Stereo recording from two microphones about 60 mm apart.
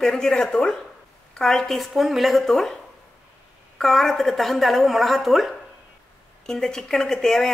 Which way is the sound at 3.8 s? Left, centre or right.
Centre.